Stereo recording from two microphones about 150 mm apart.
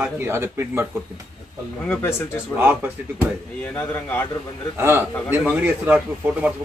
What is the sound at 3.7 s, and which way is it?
Speech, 15° left (ahead or behind).